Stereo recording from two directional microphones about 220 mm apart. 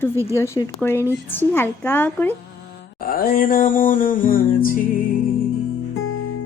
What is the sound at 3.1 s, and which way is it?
Music, 40° left (ahead or behind).